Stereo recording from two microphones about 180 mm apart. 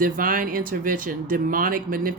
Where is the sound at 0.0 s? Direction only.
50° right (ahead or behind).